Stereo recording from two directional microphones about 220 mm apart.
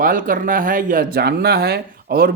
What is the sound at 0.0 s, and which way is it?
Speech, 40° right (ahead or behind).